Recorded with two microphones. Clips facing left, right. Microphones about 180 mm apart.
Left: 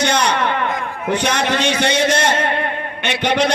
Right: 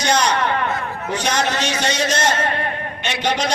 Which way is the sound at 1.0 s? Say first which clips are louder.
Left 3 dB; 60° left (ahead or behind).